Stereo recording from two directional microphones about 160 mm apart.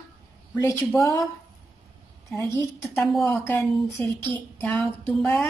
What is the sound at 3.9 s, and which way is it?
A woman's voice, 10° left (ahead or behind).